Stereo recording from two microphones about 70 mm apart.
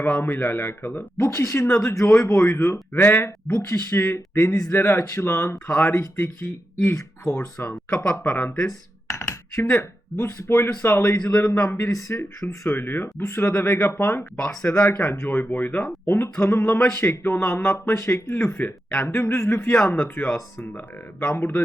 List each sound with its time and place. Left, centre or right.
0.0 s speech: left
1.3 s speech: left
8.3 s speech: left
10.2 s speech: left
11.9 s speech: left
12.7 s speech: left
19.0 s speech: left
19.9 s speech: left